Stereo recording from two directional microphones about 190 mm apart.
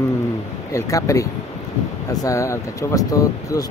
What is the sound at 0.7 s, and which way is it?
Speech, 15° left (ahead or behind).